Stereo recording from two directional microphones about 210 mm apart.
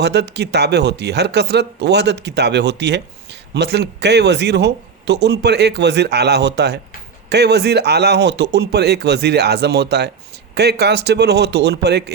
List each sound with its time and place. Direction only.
0.0 s speech: 55° right (ahead or behind)